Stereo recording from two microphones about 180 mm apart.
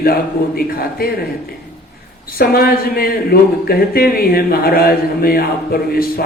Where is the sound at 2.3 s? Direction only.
60° left (ahead or behind).